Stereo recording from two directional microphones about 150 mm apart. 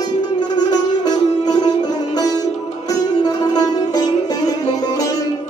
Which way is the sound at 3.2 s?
25° left (ahead or behind).